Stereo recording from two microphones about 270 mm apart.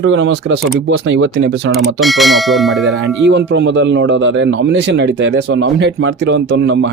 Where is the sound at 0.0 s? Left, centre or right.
Right.